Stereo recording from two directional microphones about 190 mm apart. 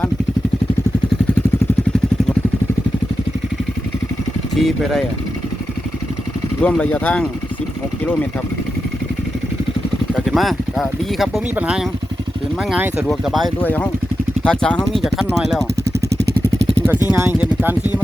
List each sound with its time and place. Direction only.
4.5 s speech: centre (ahead or behind)
6.6 s speech: 10° left (ahead or behind)
10.2 s speech: centre (ahead or behind)
16.0 s vehicle: 60° right (ahead or behind)
17.1 s speech: 10° right (ahead or behind)